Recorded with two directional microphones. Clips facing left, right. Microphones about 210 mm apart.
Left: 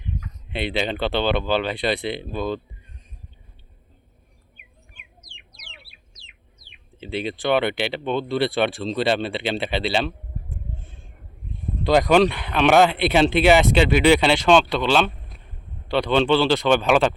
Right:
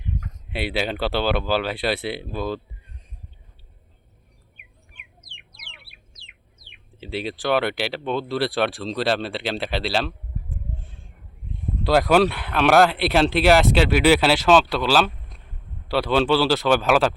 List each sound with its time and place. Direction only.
0.5 s speech: 5° right (ahead or behind)
5.4 s chicken: 55° right (ahead or behind)
7.0 s speech: centre (ahead or behind)